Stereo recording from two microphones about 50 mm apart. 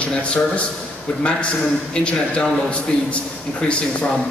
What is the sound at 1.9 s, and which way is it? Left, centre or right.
A man's voice, left.